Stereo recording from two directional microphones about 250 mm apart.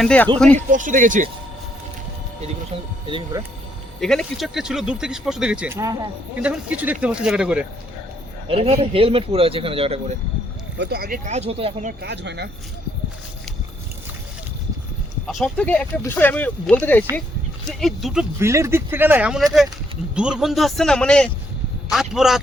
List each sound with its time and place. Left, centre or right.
0.0 s speech: centre
0.7 s speech: right
3.1 s speech: centre
4.0 s speech: centre
8.4 s speech: right
10.8 s speech: right
12.0 s speech: right
15.3 s speech: centre